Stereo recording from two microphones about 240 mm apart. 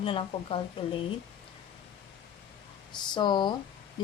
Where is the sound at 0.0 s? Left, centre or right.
Left.